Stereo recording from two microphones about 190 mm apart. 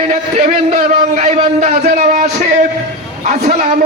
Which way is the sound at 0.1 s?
45° right (ahead or behind).